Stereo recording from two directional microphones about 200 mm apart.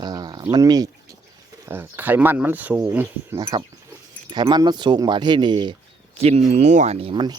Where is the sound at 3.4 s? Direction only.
25° right (ahead or behind).